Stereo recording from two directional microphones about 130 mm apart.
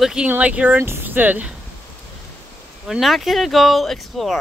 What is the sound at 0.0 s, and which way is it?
Speech, 5° right (ahead or behind).